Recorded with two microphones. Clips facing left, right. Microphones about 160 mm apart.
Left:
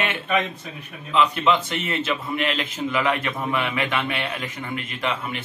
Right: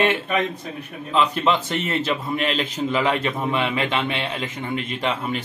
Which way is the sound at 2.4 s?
35° right (ahead or behind).